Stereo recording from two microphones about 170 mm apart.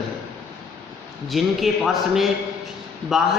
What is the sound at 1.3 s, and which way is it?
Speech, centre (ahead or behind).